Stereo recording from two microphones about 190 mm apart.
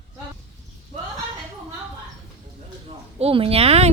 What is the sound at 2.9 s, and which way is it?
Speech, 30° right (ahead or behind).